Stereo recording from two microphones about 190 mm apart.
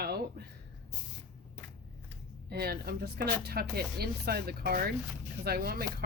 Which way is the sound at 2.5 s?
55° right (ahead or behind).